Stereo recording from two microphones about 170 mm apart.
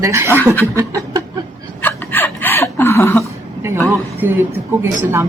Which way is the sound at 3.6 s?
15° right (ahead or behind).